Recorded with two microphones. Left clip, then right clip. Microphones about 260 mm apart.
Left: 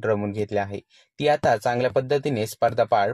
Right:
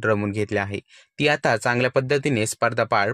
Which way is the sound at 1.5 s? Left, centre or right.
Right.